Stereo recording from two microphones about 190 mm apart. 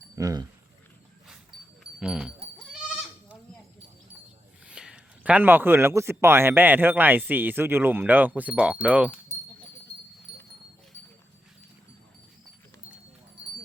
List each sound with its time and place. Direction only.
0.2 s speech: 20° right (ahead or behind)
1.8 s dog: 5° right (ahead or behind)
4.7 s speech: 5° right (ahead or behind)